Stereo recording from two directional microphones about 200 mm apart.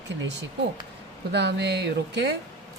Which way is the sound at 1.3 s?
60° right (ahead or behind).